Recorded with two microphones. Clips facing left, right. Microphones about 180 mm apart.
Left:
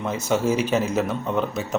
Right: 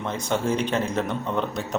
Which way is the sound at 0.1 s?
5° left (ahead or behind).